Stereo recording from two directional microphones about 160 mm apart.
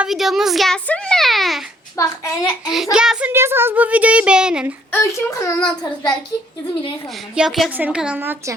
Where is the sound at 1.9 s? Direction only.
20° left (ahead or behind).